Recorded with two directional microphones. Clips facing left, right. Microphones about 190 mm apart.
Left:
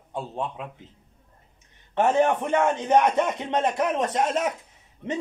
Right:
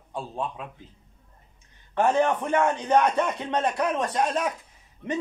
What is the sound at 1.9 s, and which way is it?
A man's voice, 20° left (ahead or behind).